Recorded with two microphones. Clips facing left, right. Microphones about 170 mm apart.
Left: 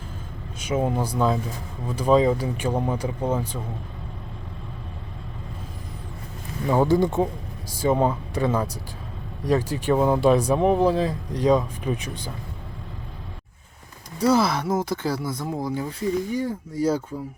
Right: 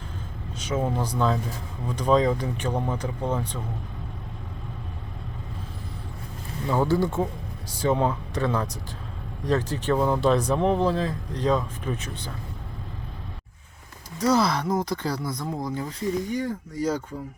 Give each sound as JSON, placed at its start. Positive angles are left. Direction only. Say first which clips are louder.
{"t": 0.6, "sound": "speech", "louder": "left 3 dB", "side_deg": 10}
{"t": 6.7, "sound": "speech", "louder": "left 3 dB", "side_deg": 15}
{"t": 14.3, "sound": "speech", "louder": "left 1 dB", "side_deg": 10}